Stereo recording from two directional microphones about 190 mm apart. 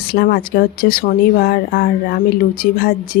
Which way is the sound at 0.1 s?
55° left (ahead or behind).